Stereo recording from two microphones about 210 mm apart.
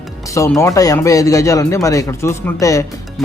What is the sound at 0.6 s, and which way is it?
Speech, 15° left (ahead or behind).